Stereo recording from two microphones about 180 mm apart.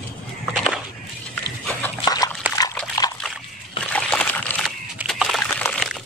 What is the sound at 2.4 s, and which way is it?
Dog, 10° right (ahead or behind).